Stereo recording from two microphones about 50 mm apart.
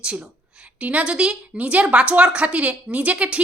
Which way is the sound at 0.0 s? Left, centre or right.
Centre.